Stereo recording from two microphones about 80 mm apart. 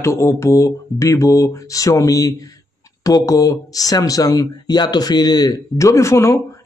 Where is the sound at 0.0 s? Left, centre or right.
Left.